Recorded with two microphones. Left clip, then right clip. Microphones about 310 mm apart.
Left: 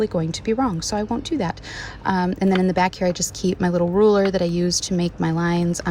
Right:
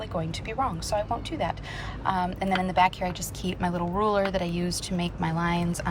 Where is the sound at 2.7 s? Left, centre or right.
Centre.